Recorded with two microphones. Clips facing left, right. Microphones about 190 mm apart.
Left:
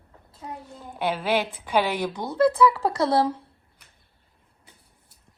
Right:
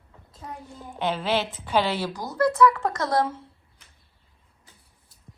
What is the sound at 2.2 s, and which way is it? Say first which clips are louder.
Speech: left 1 dB; 30° left (ahead or behind).